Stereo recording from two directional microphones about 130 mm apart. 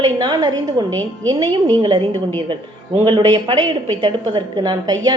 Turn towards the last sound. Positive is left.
turn(degrees=-35)  # may be behind; listen again after turning